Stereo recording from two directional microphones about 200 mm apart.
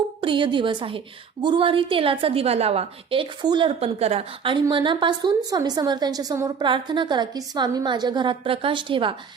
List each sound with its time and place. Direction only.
0.2 s a woman's voice: 25° right (ahead or behind)